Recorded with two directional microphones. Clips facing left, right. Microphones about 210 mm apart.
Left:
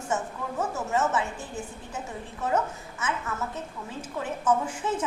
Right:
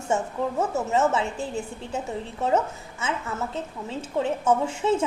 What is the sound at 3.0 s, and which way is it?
A woman's voice, 25° right (ahead or behind).